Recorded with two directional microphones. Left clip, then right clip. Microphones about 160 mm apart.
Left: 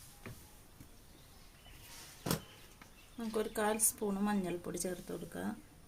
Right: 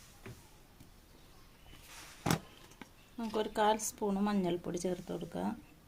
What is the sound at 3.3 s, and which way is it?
Speech, 40° right (ahead or behind).